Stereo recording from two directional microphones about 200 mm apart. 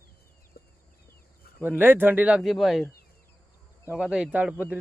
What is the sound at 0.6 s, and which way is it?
Chicken, 50° left (ahead or behind).